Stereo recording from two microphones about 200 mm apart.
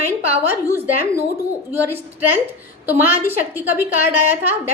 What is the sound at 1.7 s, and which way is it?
A woman's voice, 10° right (ahead or behind).